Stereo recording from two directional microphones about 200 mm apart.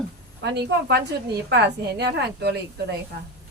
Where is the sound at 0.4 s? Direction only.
60° right (ahead or behind).